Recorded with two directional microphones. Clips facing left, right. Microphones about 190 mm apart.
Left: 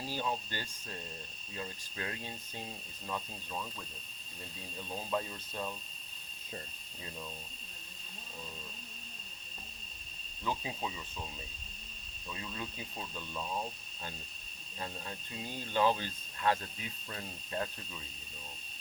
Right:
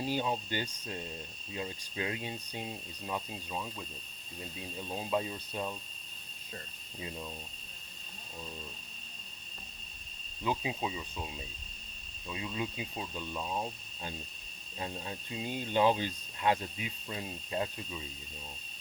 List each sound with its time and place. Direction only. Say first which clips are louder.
0.0 s speech: right 4 dB; 15° right (ahead or behind)
4.9 s speech: right 3 dB; 15° right (ahead or behind)
10.4 s speech: right 4 dB; 15° right (ahead or behind)
12.3 s speech: right 5 dB; 15° right (ahead or behind)
14.8 s speech: right 3 dB; 20° right (ahead or behind)